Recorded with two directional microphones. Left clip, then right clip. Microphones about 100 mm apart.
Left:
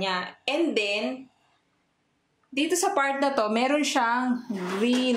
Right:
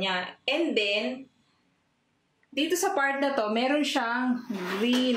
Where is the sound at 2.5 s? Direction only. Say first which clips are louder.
Left 2 dB; 40° left (ahead or behind).